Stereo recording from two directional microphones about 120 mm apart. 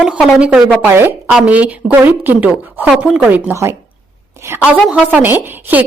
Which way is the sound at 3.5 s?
25° right (ahead or behind).